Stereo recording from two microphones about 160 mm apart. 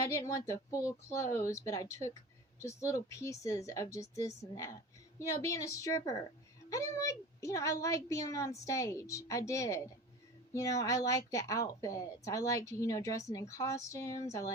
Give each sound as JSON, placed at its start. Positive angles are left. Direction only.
{"t": 0.0, "sound": "a woman's voice", "side_deg": 20}